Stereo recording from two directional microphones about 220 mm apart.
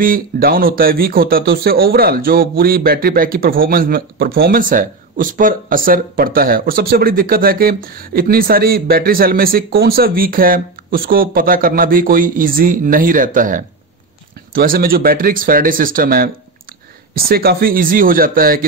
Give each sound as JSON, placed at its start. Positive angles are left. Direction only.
{"t": 0.0, "sound": "speech", "side_deg": -40}